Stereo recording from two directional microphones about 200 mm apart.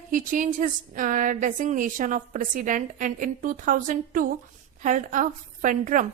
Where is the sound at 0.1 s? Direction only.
40° right (ahead or behind).